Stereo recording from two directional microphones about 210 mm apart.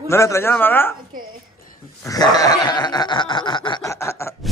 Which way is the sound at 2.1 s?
20° left (ahead or behind).